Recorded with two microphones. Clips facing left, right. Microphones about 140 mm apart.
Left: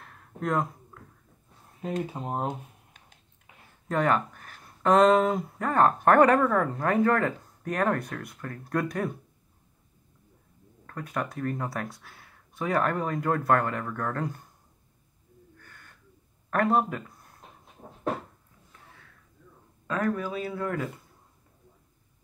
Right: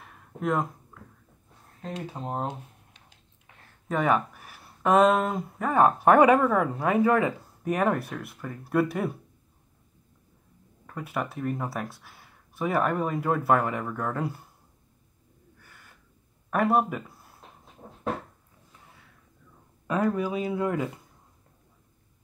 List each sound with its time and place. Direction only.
0.0 s a sound: 5° right (ahead or behind)
1.8 s speech: 10° left (ahead or behind)
2.4 s a sound: 50° left (ahead or behind)
3.9 s speech: 5° right (ahead or behind)
10.9 s speech: 10° right (ahead or behind)
15.5 s gasp: 10° right (ahead or behind)
16.4 s speech: 5° right (ahead or behind)
19.9 s speech: 15° right (ahead or behind)